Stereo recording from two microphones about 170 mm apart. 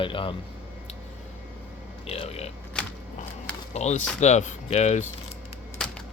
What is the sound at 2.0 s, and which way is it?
Speech, 35° left (ahead or behind).